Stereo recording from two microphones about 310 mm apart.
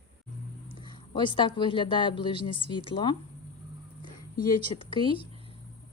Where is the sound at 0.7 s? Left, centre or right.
Centre.